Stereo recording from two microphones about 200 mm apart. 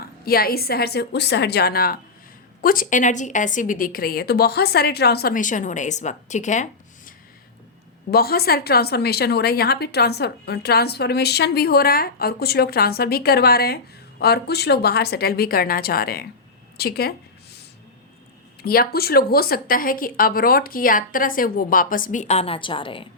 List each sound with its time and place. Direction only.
0.3 s a woman's voice: 50° left (ahead or behind)
8.1 s a woman's voice: 50° left (ahead or behind)
16.7 s a sound: 50° left (ahead or behind)
18.6 s a woman's voice: 50° left (ahead or behind); by 23.0 s 25° left (ahead or behind)